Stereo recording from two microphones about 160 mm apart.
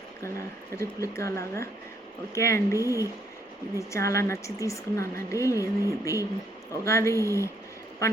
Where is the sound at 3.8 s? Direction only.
20° left (ahead or behind).